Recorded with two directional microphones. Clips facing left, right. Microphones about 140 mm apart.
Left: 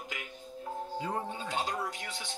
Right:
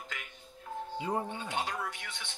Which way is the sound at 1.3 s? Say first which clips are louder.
Left 1 dB; 35° left (ahead or behind).